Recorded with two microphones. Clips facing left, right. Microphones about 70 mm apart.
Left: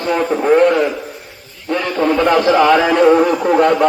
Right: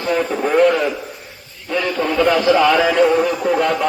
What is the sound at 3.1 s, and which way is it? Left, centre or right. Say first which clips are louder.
Speech: left 5 dB; left.